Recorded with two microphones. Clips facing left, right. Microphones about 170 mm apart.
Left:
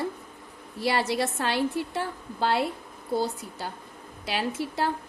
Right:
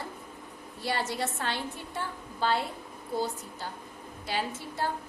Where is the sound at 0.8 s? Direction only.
85° left.